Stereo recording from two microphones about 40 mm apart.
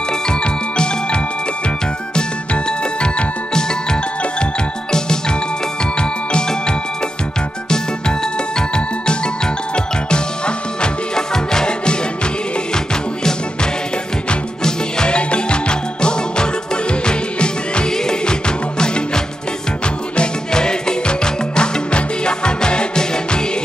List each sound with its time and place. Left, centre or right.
0.3 s music: left
8.5 s music: centre
14.6 s music: left